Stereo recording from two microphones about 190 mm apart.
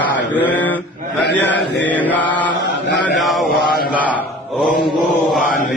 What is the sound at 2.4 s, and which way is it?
Chant, 70° left (ahead or behind).